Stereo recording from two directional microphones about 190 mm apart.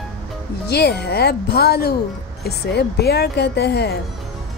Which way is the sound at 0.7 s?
60° left (ahead or behind).